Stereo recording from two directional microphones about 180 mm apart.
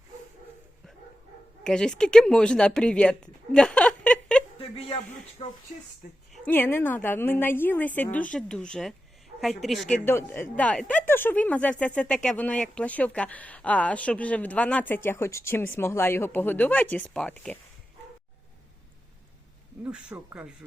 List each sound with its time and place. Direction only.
1.6 s speech: 5° left (ahead or behind)
4.5 s a sound: 30° left (ahead or behind)
5.4 s speech: 35° left (ahead or behind)
6.3 s speech: 10° left (ahead or behind)
9.9 s speech: 10° left (ahead or behind)
19.8 s speech: 5° right (ahead or behind)